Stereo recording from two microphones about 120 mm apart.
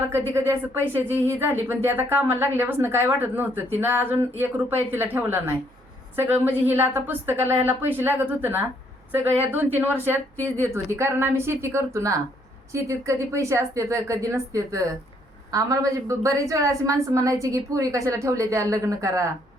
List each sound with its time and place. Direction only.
0.1 s a woman's voice: 20° right (ahead or behind)